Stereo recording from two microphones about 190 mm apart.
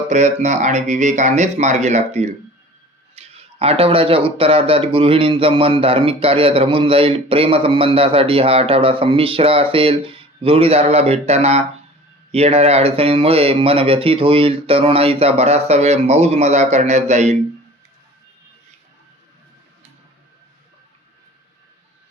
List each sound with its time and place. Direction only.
0.1 s speech: 40° right (ahead or behind)